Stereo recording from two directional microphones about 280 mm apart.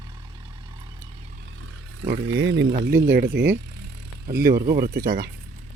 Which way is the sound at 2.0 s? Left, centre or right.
Right.